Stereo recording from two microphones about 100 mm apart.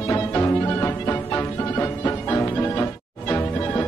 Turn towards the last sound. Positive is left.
turn(degrees=20)  # may be behind; listen again after turning